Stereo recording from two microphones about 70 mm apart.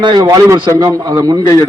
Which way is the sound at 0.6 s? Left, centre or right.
Right.